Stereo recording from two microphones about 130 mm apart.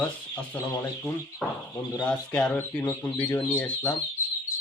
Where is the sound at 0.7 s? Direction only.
20° left (ahead or behind).